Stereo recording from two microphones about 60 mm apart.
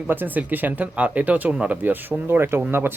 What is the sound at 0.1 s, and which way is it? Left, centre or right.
A man's voice, right.